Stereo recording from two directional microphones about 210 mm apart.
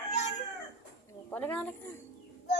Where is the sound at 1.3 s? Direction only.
5° left (ahead or behind).